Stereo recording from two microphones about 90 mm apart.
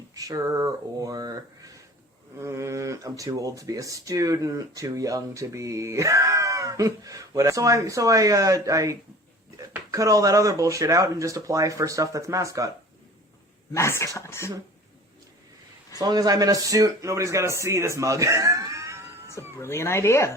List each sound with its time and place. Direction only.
0.1 s speech: 40° right (ahead or behind)
2.4 s speech: 30° right (ahead or behind)
13.7 s speech: 30° left (ahead or behind)
16.0 s speech: 45° right (ahead or behind)
19.5 s speech: 30° left (ahead or behind)